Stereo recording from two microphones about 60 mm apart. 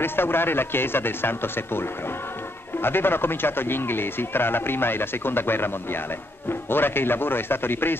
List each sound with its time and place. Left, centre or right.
0.0 s speech: left
6.7 s speech: left